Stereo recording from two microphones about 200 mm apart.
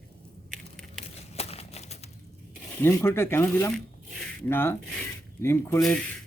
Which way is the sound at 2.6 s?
10° left (ahead or behind).